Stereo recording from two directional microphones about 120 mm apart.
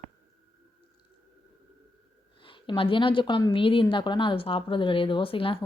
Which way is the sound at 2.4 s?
45° left (ahead or behind).